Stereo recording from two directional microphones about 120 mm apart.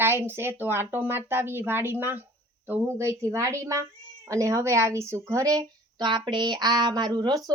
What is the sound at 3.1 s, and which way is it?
Speech, 25° right (ahead or behind).